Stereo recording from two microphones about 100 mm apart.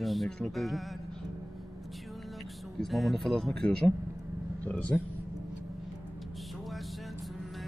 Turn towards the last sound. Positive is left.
turn(degrees=0)  # may be behind; listen again after turning